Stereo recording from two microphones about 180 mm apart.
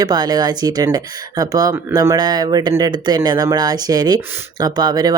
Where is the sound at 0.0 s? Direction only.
20° right (ahead or behind).